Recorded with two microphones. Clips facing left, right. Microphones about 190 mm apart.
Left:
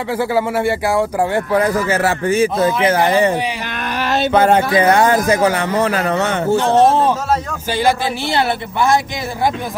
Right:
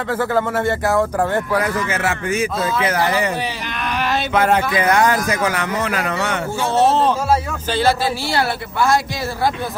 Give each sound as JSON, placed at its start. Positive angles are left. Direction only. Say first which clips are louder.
{"t": 0.1, "sound": "speech", "louder": "left 2 dB", "side_deg": 10}
{"t": 1.6, "sound": "speech", "louder": "left 5 dB", "side_deg": 35}
{"t": 6.7, "sound": "speech", "louder": "left 1 dB", "side_deg": 10}